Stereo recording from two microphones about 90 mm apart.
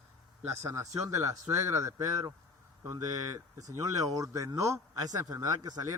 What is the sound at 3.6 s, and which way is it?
A man's voice, 40° right (ahead or behind).